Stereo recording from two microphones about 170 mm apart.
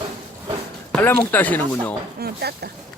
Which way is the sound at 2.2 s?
70° right (ahead or behind).